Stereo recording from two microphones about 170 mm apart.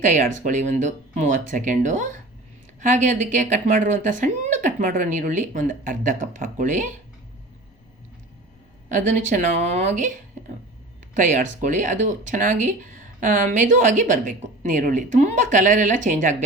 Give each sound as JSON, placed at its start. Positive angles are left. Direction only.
{"t": 0.1, "sound": "speech", "side_deg": -45}
{"t": 8.9, "sound": "speech", "side_deg": -45}